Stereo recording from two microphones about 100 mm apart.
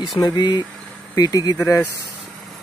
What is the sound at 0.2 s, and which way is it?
Speech, 40° left (ahead or behind).